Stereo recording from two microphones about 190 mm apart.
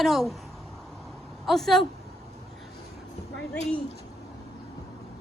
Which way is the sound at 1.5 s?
Centre (ahead or behind).